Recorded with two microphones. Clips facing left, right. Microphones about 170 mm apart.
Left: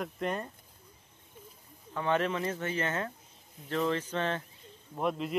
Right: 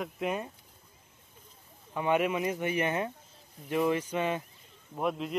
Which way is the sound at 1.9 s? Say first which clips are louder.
Right 2 dB; 15° right (ahead or behind).